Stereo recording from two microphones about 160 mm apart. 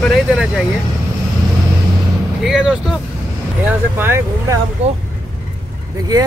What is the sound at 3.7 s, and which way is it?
Speech, 15° right (ahead or behind).